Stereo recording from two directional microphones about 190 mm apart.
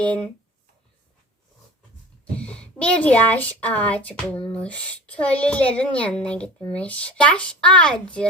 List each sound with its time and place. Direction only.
0.0 s a child's voice: 5° left (ahead or behind)
2.4 s a child's voice: 5° left (ahead or behind)